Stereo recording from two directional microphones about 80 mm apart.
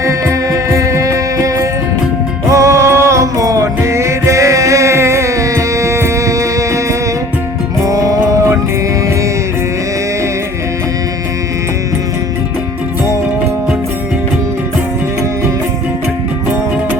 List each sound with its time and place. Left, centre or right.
0.0 s music: right